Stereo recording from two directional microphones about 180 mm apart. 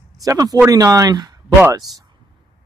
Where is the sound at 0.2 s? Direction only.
20° right (ahead or behind).